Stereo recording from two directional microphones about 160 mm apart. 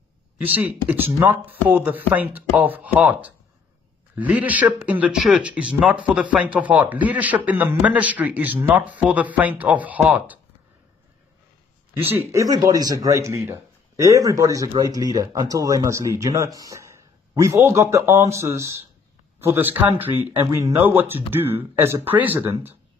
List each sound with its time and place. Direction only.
0.4 s a man's voice: 10° right (ahead or behind)
12.0 s a man's voice: 15° right (ahead or behind)